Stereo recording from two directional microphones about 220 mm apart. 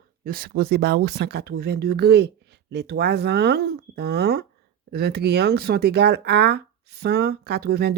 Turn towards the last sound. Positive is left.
turn(degrees=-45)  # may be behind; listen again after turning